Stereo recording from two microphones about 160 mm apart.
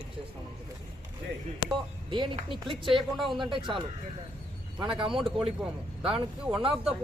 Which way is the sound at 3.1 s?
Centre (ahead or behind).